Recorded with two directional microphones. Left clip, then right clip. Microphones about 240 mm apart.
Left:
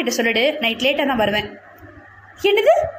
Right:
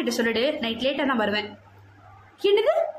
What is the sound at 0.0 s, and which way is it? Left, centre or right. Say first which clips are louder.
Speech: left 6 dB; centre.